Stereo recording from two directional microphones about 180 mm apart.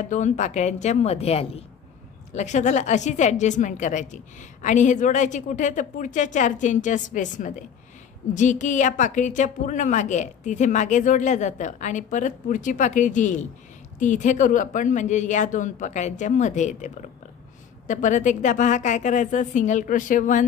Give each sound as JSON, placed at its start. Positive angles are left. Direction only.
{"t": 0.1, "sound": "a woman's voice", "side_deg": 40}